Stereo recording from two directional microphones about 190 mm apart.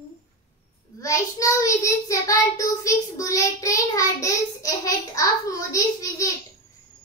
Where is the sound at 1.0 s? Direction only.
15° left (ahead or behind).